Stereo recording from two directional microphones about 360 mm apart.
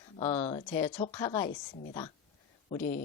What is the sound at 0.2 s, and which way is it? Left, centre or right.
Speech, centre.